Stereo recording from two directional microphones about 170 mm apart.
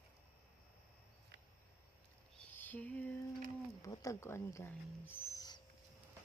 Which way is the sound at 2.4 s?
10° left (ahead or behind).